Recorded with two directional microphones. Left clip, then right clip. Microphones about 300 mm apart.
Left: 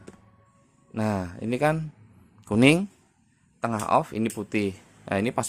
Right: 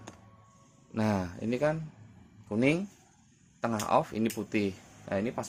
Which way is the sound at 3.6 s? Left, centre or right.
Centre.